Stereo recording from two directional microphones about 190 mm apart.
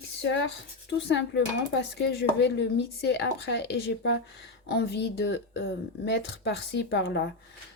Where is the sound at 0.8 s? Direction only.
70° left (ahead or behind).